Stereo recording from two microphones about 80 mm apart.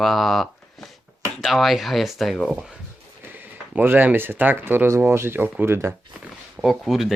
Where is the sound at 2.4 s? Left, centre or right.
Centre.